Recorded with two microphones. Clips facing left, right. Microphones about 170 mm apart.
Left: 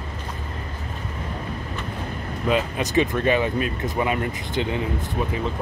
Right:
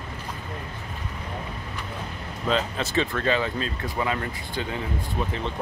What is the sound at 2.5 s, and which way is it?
Speech, 15° left (ahead or behind).